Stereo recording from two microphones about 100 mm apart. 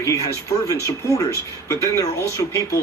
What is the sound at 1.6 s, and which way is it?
Speech, 30° left (ahead or behind).